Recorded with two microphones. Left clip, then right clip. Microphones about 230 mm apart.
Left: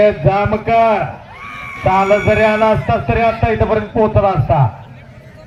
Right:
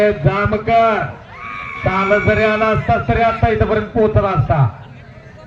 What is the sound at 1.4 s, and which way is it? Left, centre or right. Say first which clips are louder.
Neigh: right 4 dB; left.